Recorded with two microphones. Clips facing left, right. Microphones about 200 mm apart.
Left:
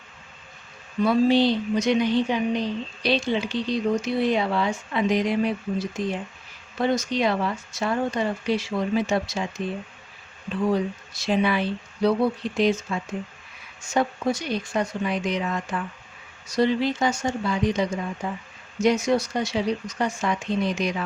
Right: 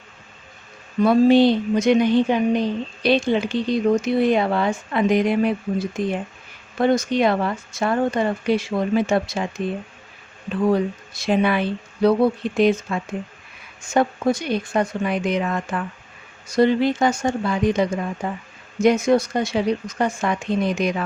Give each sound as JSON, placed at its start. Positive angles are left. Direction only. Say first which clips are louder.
{"t": 1.0, "sound": "a woman's voice", "louder": "right 5 dB", "side_deg": -50}
{"t": 10.7, "sound": "a woman's voice", "louder": "right 5 dB", "side_deg": -55}